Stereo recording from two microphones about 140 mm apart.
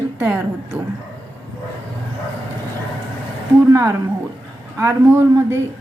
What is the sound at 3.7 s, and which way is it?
A woman's voice, 20° right (ahead or behind).